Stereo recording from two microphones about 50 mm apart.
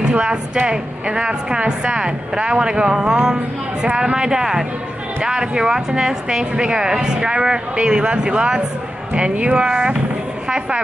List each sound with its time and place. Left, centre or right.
0.0 s speech: right